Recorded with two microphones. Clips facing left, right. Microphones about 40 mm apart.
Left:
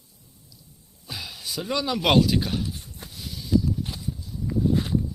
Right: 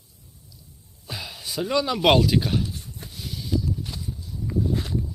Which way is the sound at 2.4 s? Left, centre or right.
Centre.